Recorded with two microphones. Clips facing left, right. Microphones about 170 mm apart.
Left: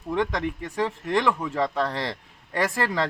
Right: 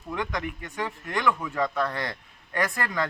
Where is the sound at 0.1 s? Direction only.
30° left (ahead or behind).